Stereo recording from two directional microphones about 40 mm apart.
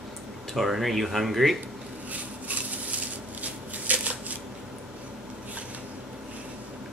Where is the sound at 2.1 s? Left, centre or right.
Right.